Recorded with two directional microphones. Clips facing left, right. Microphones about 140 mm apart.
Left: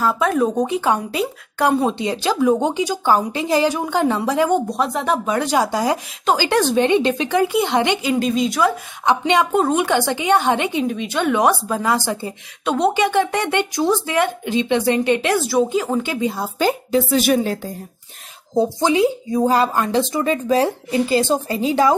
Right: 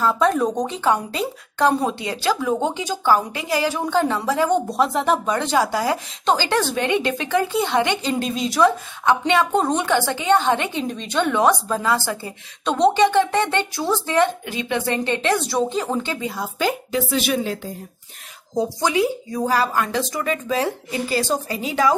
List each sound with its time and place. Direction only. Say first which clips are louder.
0.0 s a woman's voice: left 1 dB; 5° left (ahead or behind)
1.9 s a woman's voice: left 2 dB; 20° left (ahead or behind)
4.6 s a woman's voice: right 1 dB; centre (ahead or behind); by 12.3 s 20° left (ahead or behind)
12.6 s a woman's voice: right 1 dB; 5° left (ahead or behind)
14.4 s a woman's voice: left 6 dB; 25° left (ahead or behind)
15.4 s a woman's voice: left 4 dB; 5° left (ahead or behind)
16.3 s a woman's voice: left 3 dB; 30° left (ahead or behind)
18.5 s speech: left 4 dB; 25° left (ahead or behind)